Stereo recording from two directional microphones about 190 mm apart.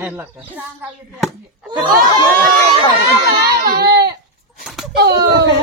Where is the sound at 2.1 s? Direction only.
20° right (ahead or behind).